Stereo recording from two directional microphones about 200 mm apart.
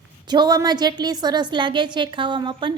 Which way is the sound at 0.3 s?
20° right (ahead or behind).